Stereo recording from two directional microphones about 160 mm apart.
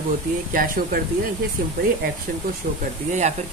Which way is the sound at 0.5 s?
60° right (ahead or behind).